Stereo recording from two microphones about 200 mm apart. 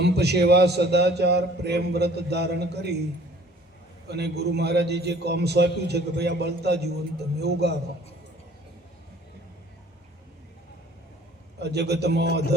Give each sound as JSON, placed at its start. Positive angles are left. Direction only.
{"t": 0.0, "sound": "a man's voice", "side_deg": -55}
{"t": 4.1, "sound": "a man's voice", "side_deg": -55}
{"t": 11.6, "sound": "a man's voice", "side_deg": -55}